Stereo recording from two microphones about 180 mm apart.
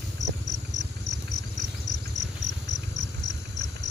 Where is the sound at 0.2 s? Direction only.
20° left (ahead or behind).